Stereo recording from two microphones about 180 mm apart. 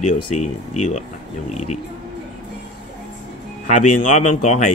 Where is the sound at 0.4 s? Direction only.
40° left (ahead or behind).